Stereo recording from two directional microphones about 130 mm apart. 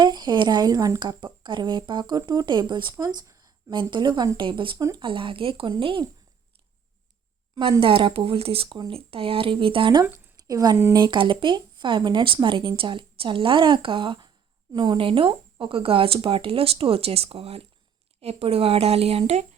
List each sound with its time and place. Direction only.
0.0 s speech: 35° right (ahead or behind)
7.8 s speech: 45° right (ahead or behind)
10.0 s a woman's voice: 25° right (ahead or behind); by 19.5 s 55° right (ahead or behind)